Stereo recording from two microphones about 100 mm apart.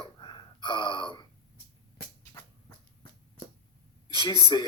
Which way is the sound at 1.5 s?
30° left (ahead or behind).